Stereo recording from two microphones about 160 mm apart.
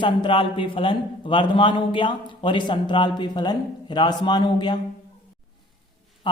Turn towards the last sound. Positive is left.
turn(degrees=30)  # may be behind; listen again after turning